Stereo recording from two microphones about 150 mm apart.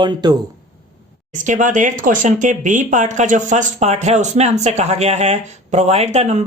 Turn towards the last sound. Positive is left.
turn(degrees=-45)  # may be behind; listen again after turning